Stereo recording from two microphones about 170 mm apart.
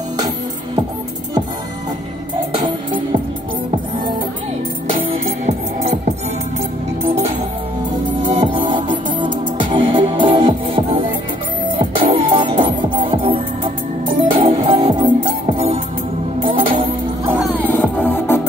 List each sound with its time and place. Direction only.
8.2 s music: 30° right (ahead or behind)
12.0 s music: 30° right (ahead or behind)
17.4 s music: centre (ahead or behind)
18.0 s music: 10° left (ahead or behind)